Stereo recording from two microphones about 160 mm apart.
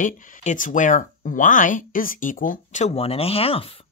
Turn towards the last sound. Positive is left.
turn(degrees=35)  # may be behind; listen again after turning